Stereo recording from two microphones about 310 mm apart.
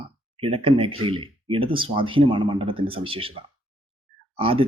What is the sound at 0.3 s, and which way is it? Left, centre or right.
Speech, centre.